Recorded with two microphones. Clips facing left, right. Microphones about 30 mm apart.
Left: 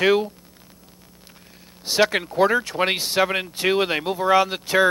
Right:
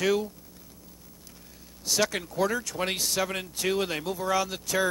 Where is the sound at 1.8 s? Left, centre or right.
Left.